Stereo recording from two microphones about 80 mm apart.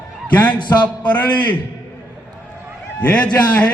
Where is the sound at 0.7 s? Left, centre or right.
Left.